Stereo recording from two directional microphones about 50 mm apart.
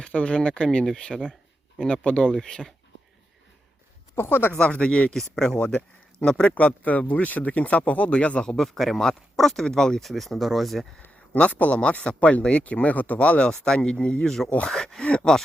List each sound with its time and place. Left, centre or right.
0.0 s speech: left
2.3 s speech: centre
4.1 s speech: left
4.5 s speech: left
5.1 s speech: centre
5.5 s speech: left
6.4 s speech: left
8.4 s speech: centre
10.1 s speech: centre
11.3 s speech: left
14.3 s speech: centre
15.0 s a sound: left